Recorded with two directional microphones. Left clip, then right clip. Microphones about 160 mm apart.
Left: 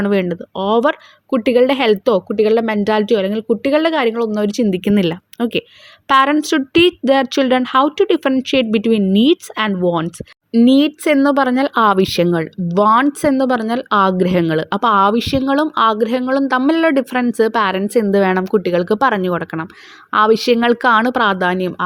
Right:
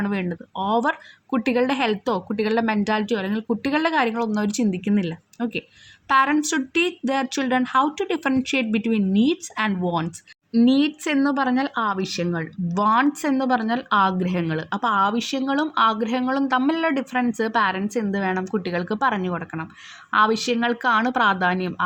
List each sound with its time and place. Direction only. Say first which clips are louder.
0.0 s speech: left 10 dB; 40° left (ahead or behind)
4.7 s speech: left 9 dB; 45° left (ahead or behind)